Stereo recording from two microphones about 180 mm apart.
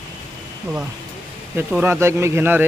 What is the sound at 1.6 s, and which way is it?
A man's voice, 15° right (ahead or behind).